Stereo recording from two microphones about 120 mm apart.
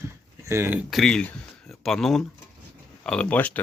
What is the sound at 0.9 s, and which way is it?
Speech, 5° left (ahead or behind).